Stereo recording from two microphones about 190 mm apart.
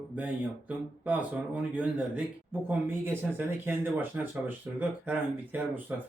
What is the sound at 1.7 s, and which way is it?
Speech, 10° right (ahead or behind).